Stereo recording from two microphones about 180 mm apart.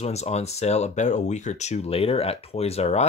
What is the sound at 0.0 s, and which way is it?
Speech, 35° left (ahead or behind).